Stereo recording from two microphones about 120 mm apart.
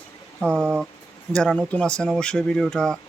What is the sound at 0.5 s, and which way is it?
Speech, 20° right (ahead or behind).